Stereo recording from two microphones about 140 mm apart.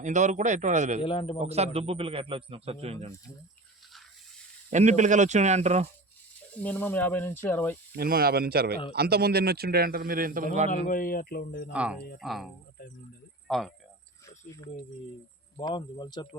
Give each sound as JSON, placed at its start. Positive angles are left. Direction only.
{"t": 0.0, "sound": "speech", "side_deg": -60}
{"t": 1.0, "sound": "speech", "side_deg": 40}
{"t": 1.4, "sound": "a man's voice", "side_deg": -50}
{"t": 4.7, "sound": "speech", "side_deg": -60}
{"t": 6.6, "sound": "speech", "side_deg": 10}
{"t": 7.9, "sound": "speech", "side_deg": -90}
{"t": 10.8, "sound": "speech", "side_deg": 80}
{"t": 11.7, "sound": "speech", "side_deg": -10}
{"t": 13.5, "sound": "speech", "side_deg": 0}
{"t": 15.6, "sound": "speech", "side_deg": 30}